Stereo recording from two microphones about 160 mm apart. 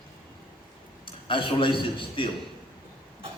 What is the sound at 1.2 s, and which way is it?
A man's voice, 30° left (ahead or behind).